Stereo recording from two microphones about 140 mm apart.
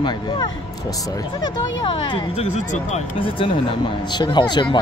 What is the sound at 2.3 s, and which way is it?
Speech, 50° left (ahead or behind).